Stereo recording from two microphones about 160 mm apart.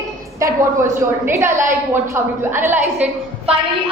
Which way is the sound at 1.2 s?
15° right (ahead or behind).